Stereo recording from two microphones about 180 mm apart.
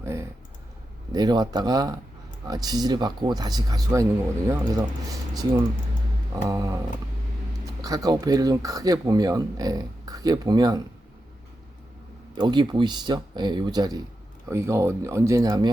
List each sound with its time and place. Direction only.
0.0 s clicking: 15° right (ahead or behind)
1.1 s speech: 20° right (ahead or behind)
6.3 s speech: 20° right (ahead or behind)
7.8 s speech: 20° right (ahead or behind)
12.3 s speech: 25° right (ahead or behind)